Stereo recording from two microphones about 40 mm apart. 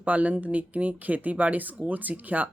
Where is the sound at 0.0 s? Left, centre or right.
Right.